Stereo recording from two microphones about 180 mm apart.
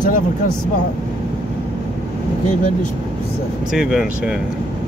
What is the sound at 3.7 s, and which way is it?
Speech, 5° right (ahead or behind).